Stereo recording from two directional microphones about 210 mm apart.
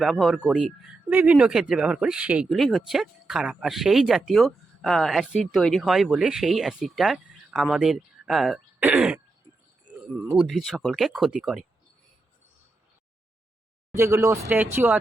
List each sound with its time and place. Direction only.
0.0 s speech: centre (ahead or behind)
13.9 s speech: 15° right (ahead or behind)